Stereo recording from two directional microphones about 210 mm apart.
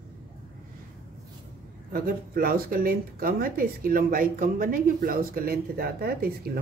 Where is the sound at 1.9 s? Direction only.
45° right (ahead or behind).